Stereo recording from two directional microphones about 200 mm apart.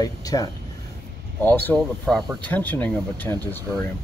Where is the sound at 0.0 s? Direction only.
20° left (ahead or behind).